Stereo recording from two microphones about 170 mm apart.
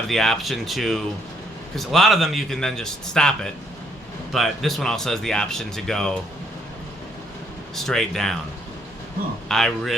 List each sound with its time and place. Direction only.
0.1 s speech: centre (ahead or behind)
7.8 s speech: centre (ahead or behind)
9.5 s speech: centre (ahead or behind)